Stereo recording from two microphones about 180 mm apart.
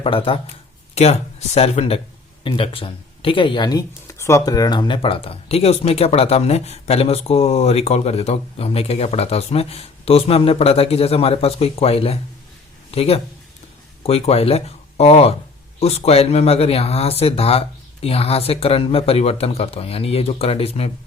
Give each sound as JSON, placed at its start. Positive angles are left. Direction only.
{"t": 0.0, "sound": "speech", "side_deg": 30}